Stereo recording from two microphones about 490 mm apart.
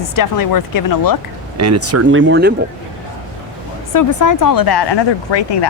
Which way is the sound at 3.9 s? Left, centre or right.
Left.